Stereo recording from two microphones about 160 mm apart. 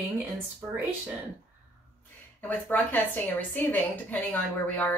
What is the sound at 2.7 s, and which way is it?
A woman's voice, 10° left (ahead or behind).